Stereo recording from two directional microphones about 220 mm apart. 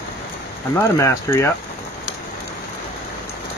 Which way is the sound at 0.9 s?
10° left (ahead or behind).